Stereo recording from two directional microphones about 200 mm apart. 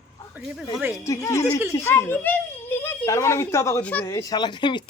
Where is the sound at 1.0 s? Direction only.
15° left (ahead or behind).